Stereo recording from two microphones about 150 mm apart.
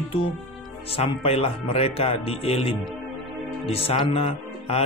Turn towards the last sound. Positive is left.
turn(degrees=40)  # may be behind; listen again after turning